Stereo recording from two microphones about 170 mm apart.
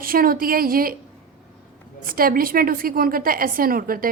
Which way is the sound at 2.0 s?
60° right (ahead or behind).